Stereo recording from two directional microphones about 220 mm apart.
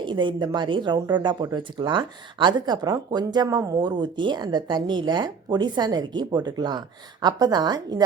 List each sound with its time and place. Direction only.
0.0 s speech: 20° right (ahead or behind)